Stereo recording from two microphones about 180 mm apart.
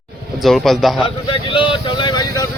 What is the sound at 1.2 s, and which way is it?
Vehicle, 30° left (ahead or behind).